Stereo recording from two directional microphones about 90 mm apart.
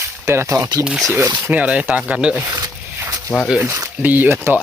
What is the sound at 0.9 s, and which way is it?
Speech, centre (ahead or behind).